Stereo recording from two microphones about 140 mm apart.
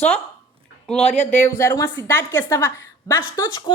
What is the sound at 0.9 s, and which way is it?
Speech, 50° left (ahead or behind).